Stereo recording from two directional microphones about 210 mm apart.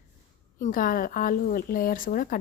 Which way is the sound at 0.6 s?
40° left (ahead or behind).